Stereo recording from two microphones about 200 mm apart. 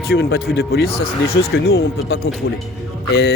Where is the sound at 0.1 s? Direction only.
50° left (ahead or behind).